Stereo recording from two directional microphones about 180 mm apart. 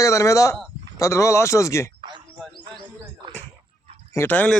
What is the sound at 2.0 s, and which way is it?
Bird, 25° right (ahead or behind).